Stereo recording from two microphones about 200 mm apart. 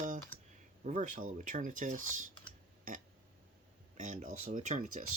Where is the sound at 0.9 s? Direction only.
40° right (ahead or behind).